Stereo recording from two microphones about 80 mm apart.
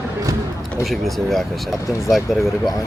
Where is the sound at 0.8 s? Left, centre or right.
Centre.